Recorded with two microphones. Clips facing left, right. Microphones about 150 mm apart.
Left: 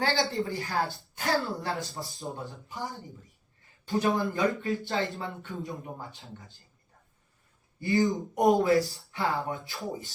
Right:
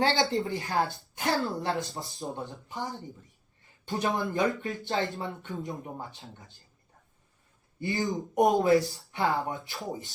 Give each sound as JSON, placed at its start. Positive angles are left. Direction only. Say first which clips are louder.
{"t": 0.0, "sound": "speech", "louder": "right 2 dB", "side_deg": -20}
{"t": 7.8, "sound": "speech", "louder": "left 4 dB", "side_deg": -20}